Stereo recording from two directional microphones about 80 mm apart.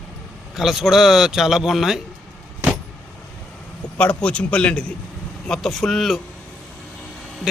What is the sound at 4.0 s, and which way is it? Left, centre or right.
Speech, centre.